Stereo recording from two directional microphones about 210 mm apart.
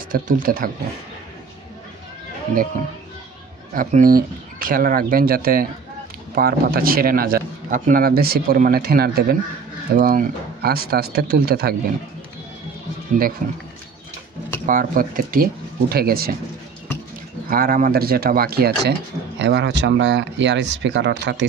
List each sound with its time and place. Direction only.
0.1 s speech: 40° right (ahead or behind)
3.7 s a man's voice: 40° right (ahead or behind)
13.4 s a man's voice: 35° right (ahead or behind)
14.7 s speech: 40° right (ahead or behind)
17.5 s speech: 45° right (ahead or behind)